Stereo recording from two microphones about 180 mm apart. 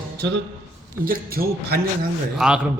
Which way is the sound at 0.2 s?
70° right (ahead or behind).